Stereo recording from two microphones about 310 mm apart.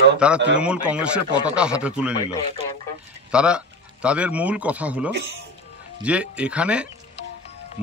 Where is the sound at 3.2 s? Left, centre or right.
Centre.